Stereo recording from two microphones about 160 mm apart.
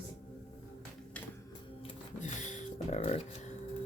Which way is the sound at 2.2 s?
50° left (ahead or behind).